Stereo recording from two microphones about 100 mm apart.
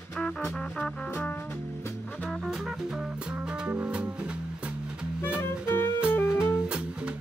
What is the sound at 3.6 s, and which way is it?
Music, 15° right (ahead or behind).